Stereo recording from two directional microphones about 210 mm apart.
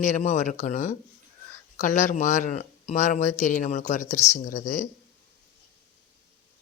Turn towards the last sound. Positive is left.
turn(degrees=35)  # may be behind; listen again after turning